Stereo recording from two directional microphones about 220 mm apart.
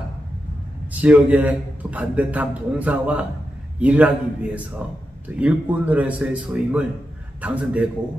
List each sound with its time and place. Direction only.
1.0 s a man's voice: 5° right (ahead or behind)